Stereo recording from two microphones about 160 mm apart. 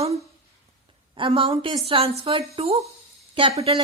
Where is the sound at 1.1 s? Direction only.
35° right (ahead or behind).